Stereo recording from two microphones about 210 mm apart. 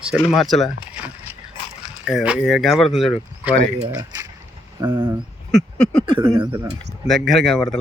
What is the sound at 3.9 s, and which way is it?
Speech, 15° right (ahead or behind).